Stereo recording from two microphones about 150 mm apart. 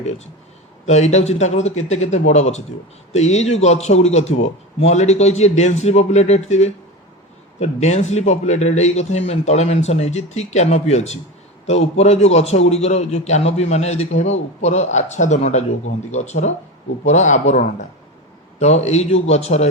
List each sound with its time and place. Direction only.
0.9 s a man's voice: 50° left (ahead or behind)
18.6 s a man's voice: 45° left (ahead or behind)